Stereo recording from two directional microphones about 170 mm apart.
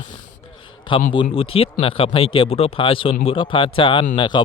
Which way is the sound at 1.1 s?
30° left (ahead or behind).